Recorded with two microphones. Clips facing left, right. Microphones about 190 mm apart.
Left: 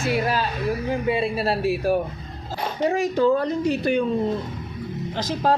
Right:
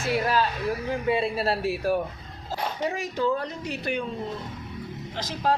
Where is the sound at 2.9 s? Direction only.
35° left (ahead or behind).